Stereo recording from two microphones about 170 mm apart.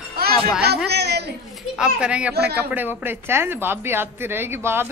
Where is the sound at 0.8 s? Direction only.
75° right (ahead or behind).